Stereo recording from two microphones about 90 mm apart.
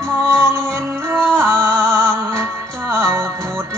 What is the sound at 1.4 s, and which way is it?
Music, 25° right (ahead or behind).